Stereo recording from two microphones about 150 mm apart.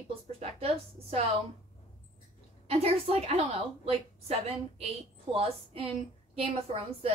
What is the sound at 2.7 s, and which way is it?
A woman's voice, 40° right (ahead or behind).